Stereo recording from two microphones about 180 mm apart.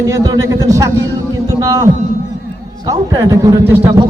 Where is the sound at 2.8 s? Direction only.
20° right (ahead or behind).